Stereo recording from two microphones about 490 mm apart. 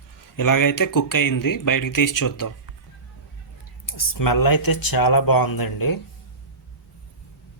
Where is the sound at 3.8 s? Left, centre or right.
Left.